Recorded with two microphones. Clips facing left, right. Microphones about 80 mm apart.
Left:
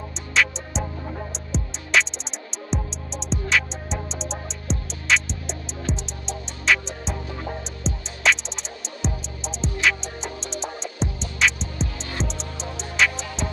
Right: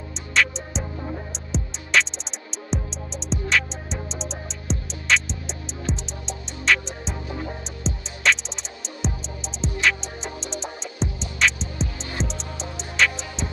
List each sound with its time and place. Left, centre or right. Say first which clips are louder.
0.3 s music: even; centre
12.2 s music: even; left
13.0 s music: even; centre